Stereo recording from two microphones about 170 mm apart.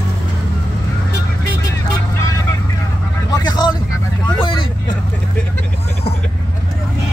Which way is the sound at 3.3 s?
25° left (ahead or behind).